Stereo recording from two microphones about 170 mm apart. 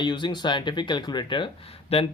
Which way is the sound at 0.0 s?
25° left (ahead or behind).